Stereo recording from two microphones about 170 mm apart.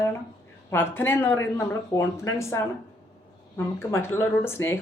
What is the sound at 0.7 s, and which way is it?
Speech, 15° left (ahead or behind).